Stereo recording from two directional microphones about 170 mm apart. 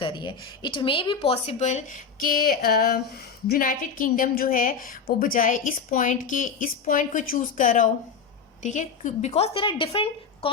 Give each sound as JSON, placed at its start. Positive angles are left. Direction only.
{"t": 0.0, "sound": "speech", "side_deg": 30}